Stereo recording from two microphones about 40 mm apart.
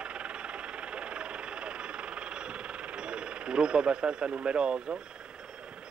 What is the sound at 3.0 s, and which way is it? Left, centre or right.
Speech, right.